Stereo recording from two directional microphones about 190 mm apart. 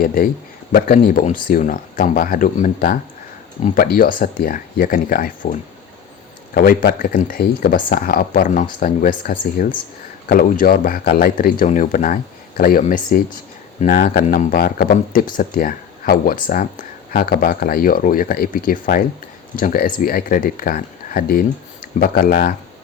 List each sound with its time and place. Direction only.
0.0 s speech: 50° left (ahead or behind)